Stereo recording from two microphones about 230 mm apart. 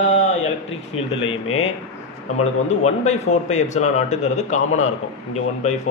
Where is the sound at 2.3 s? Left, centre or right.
Left.